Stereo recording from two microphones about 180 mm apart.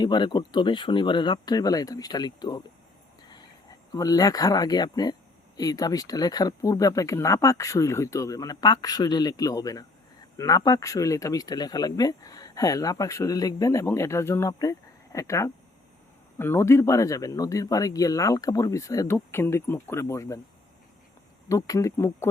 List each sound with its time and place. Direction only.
0.0 s speech: 25° left (ahead or behind)
21.5 s speech: 15° left (ahead or behind)